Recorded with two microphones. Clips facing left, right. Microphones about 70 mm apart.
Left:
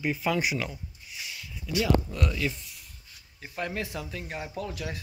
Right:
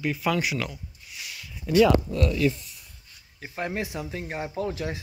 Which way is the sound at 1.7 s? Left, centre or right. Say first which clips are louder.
Right 9 dB; right.